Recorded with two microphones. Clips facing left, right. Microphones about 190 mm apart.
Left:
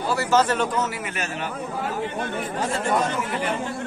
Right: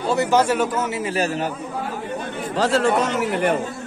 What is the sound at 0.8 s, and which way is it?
Speech, 30° right (ahead or behind).